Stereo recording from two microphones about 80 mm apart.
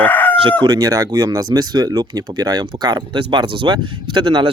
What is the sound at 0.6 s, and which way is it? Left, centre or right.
Speech, right.